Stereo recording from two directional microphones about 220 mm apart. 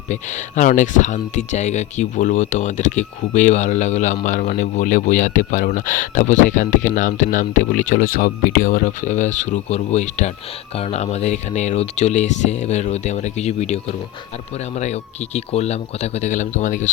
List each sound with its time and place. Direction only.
0.1 s speech: 35° left (ahead or behind)
15.4 s speech: 30° left (ahead or behind)